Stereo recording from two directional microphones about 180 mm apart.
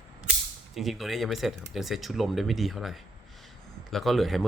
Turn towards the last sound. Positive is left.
turn(degrees=0)  # may be behind; listen again after turning